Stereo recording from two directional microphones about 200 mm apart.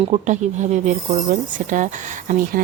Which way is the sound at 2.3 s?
40° right (ahead or behind).